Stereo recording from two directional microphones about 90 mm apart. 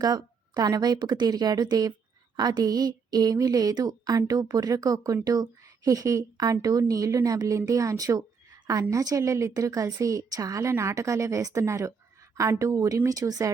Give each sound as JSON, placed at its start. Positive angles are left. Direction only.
{"t": 0.0, "sound": "a woman's voice", "side_deg": -45}